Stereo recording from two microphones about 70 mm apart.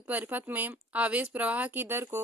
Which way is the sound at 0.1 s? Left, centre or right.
Right.